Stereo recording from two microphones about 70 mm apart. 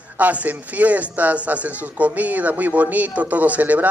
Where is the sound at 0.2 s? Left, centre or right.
Right.